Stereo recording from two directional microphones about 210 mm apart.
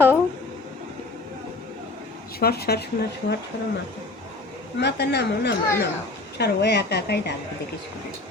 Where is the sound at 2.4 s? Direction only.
50° left (ahead or behind).